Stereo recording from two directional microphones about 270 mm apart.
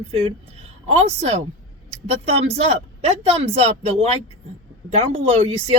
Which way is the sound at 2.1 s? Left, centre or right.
Right.